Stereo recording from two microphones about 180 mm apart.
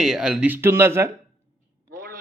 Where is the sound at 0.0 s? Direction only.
5° right (ahead or behind).